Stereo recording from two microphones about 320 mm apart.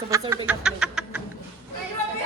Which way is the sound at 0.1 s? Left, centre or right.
Centre.